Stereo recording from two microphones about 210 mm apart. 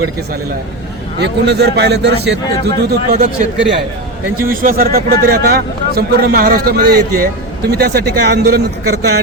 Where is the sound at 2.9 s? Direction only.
40° right (ahead or behind).